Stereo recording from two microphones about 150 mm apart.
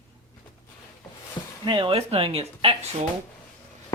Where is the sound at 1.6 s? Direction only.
30° right (ahead or behind).